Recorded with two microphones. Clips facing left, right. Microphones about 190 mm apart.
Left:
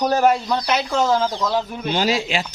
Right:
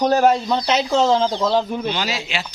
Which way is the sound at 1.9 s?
45° left (ahead or behind).